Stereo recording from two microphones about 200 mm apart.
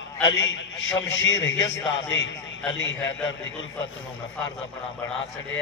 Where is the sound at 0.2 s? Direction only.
70° left (ahead or behind).